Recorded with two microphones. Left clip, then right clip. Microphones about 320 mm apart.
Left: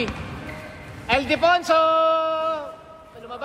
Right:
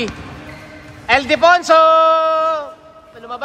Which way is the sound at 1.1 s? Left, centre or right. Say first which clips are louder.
Right 7 dB; right.